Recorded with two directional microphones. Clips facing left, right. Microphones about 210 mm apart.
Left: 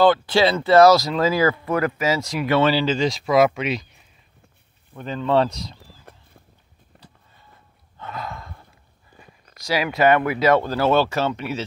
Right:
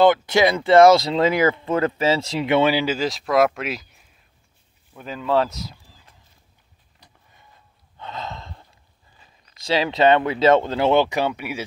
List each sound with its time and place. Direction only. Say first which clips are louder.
0.0 s speech: right 1 dB; 20° right (ahead or behind)
2.6 s speech: left 1 dB; 10° right (ahead or behind)
6.1 s clip-clop: left 10 dB; 60° left (ahead or behind)
6.9 s vehicle: left 7 dB; 60° left (ahead or behind)
8.0 s gasp: even; 20° right (ahead or behind)
9.7 s speech: right 1 dB; 25° right (ahead or behind)